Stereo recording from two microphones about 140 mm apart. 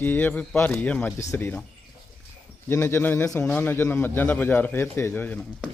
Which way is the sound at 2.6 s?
15° left (ahead or behind).